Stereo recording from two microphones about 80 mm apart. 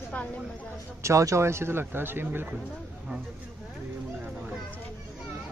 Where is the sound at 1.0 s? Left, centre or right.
Right.